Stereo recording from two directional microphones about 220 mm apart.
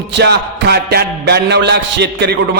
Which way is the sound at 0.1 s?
50° right (ahead or behind).